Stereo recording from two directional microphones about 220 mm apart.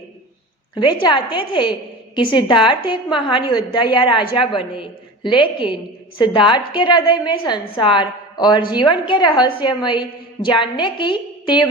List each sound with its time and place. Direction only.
1.0 s a woman's voice: 20° left (ahead or behind)